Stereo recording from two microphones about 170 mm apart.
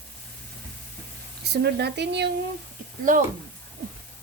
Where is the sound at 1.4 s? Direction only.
75° right (ahead or behind).